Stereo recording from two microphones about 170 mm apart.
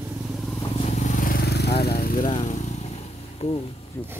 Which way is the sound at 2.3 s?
40° left (ahead or behind).